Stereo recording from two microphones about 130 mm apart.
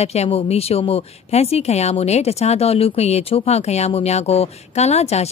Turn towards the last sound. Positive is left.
turn(degrees=55)  # may be behind; listen again after turning